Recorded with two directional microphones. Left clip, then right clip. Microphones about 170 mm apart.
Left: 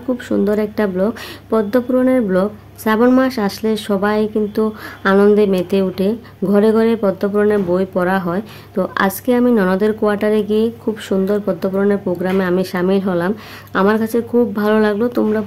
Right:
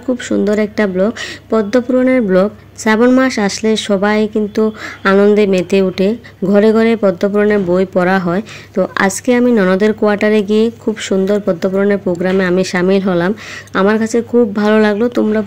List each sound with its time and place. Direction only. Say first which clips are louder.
0.3 s a woman's voice: right 2 dB; 15° right (ahead or behind)